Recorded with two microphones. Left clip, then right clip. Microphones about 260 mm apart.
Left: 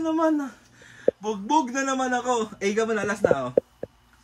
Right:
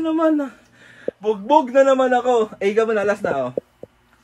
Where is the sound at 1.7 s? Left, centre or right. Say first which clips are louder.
Right 13 dB; centre.